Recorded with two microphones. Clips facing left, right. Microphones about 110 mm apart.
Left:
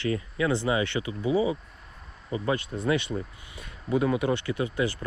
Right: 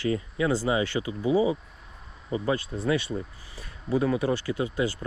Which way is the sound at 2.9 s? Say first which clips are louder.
Even; 25° left (ahead or behind).